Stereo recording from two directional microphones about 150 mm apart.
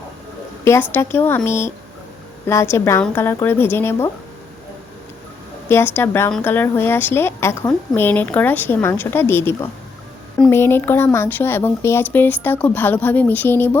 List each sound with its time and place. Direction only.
0.6 s a woman's voice: 15° left (ahead or behind)
5.6 s a woman's voice: 15° left (ahead or behind)